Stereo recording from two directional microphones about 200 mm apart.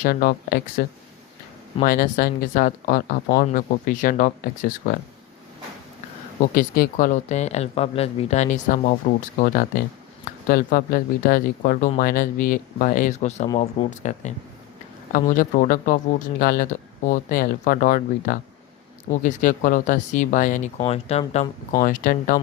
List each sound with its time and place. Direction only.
0.0 s speech: 45° left (ahead or behind)
1.8 s speech: 45° left (ahead or behind)
6.4 s speech: 45° left (ahead or behind)
21.8 s speech: 40° left (ahead or behind)